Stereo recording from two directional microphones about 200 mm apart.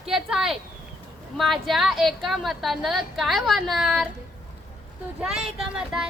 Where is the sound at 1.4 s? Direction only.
Centre (ahead or behind).